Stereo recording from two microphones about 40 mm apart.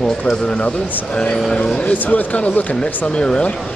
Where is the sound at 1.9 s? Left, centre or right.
Left.